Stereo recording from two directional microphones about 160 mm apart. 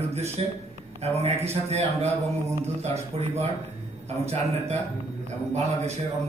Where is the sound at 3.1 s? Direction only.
40° right (ahead or behind).